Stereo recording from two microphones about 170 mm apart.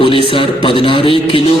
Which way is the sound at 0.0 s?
30° left (ahead or behind).